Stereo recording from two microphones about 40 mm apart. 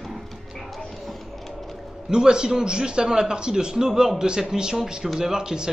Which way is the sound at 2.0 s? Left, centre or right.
Centre.